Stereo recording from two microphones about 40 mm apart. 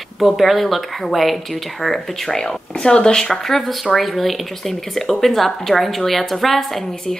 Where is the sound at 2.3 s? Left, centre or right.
Centre.